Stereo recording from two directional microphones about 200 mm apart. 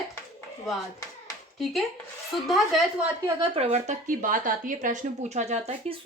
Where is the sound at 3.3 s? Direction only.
30° right (ahead or behind).